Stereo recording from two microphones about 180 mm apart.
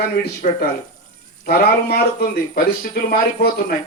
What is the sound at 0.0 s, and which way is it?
A man's voice, 60° left (ahead or behind).